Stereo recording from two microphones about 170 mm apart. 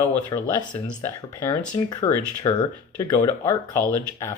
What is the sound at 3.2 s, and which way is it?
Speech, 15° left (ahead or behind).